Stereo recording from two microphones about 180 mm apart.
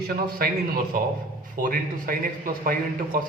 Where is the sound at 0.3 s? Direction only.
55° right (ahead or behind).